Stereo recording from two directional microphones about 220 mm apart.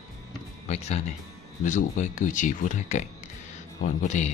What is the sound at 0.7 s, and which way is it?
Speech, 30° left (ahead or behind).